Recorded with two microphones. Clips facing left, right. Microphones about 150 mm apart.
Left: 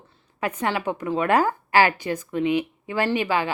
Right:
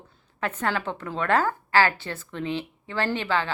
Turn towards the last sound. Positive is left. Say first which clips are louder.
# left 3 dB
turn(degrees=15)  # may be behind; listen again after turning